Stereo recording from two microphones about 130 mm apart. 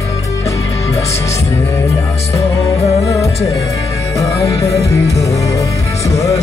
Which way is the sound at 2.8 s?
55° left (ahead or behind).